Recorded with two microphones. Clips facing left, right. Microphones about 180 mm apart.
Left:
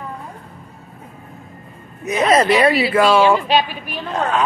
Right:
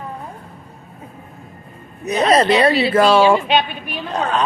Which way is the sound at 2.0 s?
35° right (ahead or behind).